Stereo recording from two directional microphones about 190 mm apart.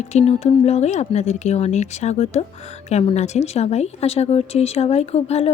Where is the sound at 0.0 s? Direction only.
35° left (ahead or behind).